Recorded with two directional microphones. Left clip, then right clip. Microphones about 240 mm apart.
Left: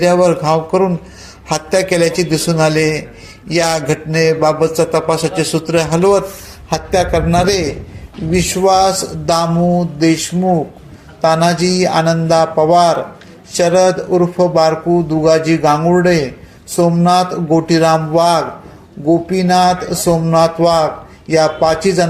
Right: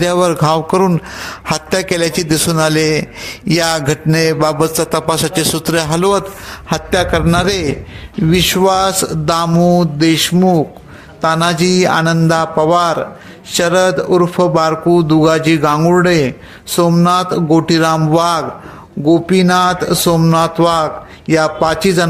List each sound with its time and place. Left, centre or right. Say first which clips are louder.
0.0 s a man's voice: left 1 dB; right
14.8 s speech: right 3 dB; right
15.2 s a man's voice: even; right